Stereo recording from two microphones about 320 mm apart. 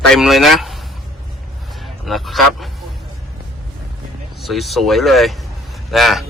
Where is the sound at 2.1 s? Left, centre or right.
Centre.